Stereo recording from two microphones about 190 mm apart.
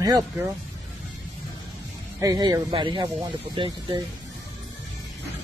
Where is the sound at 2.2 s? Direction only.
20° right (ahead or behind).